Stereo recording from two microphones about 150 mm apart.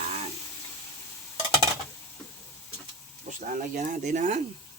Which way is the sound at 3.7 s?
60° right (ahead or behind).